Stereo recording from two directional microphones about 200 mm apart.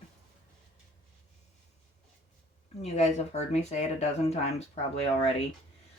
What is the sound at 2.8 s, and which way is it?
Speech, 35° left (ahead or behind).